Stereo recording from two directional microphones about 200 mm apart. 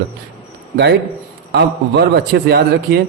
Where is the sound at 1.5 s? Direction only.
55° right (ahead or behind).